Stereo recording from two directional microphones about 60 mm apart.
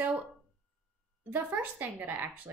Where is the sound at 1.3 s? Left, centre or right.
Right.